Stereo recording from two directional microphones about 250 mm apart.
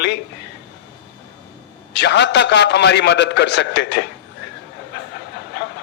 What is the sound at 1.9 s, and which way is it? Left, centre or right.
A man's voice, left.